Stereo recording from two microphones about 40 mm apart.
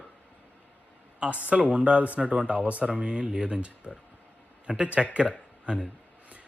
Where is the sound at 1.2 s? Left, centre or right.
Right.